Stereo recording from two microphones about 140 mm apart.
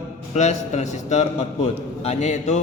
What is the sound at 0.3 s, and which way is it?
A man's voice, 55° left (ahead or behind).